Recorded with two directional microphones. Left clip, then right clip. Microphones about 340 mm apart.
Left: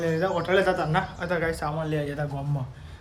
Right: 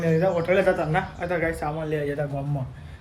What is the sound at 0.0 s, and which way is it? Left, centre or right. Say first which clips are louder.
A man's voice: right 3 dB; centre.